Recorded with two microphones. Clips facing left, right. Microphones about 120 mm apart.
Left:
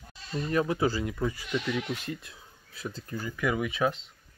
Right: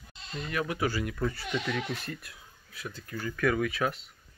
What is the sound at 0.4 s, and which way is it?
Speech, 30° left (ahead or behind).